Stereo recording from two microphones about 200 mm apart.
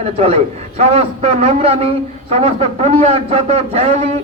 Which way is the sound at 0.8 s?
30° right (ahead or behind).